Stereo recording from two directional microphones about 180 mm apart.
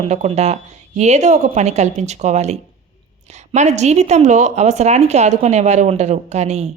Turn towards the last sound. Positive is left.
turn(degrees=-40)  # may be behind; listen again after turning